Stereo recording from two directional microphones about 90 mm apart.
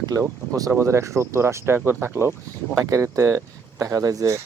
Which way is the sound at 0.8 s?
30° right (ahead or behind).